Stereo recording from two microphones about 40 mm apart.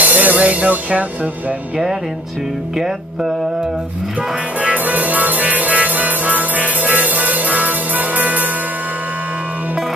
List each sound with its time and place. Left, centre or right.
0.0 s music: right
4.6 s music: right